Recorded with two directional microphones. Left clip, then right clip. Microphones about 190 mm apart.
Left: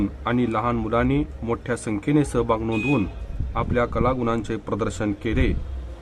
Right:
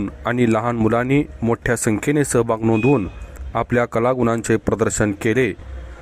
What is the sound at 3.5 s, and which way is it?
Speech, 45° right (ahead or behind).